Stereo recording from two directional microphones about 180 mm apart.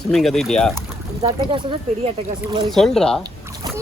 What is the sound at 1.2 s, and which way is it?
Speech, 30° right (ahead or behind).